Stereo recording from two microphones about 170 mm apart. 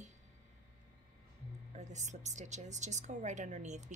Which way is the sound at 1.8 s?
45° right (ahead or behind).